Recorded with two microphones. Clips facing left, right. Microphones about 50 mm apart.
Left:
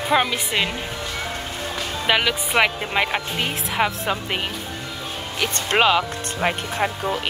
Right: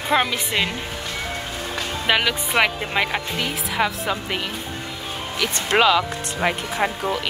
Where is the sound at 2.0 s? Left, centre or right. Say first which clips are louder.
Even; centre.